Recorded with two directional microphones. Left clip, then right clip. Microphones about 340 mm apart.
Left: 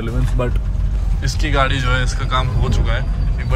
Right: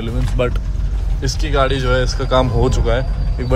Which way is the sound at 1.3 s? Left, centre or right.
Centre.